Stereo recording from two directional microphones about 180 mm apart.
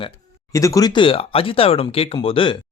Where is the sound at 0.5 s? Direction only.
20° left (ahead or behind).